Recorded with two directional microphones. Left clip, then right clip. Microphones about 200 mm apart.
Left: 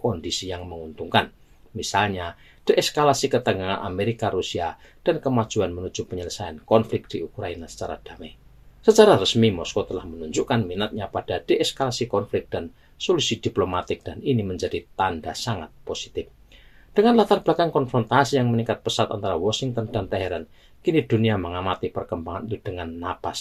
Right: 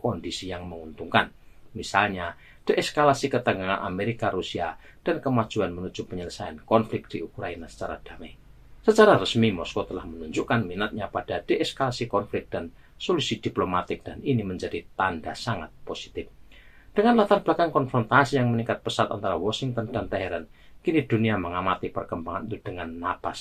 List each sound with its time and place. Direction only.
0.0 s speech: 45° left (ahead or behind)